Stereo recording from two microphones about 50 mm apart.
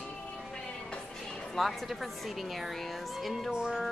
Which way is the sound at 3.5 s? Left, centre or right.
Centre.